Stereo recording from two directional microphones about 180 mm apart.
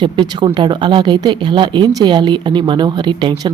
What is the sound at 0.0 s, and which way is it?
Speech, 25° right (ahead or behind).